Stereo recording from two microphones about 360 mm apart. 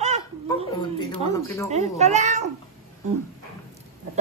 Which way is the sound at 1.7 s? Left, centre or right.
Centre.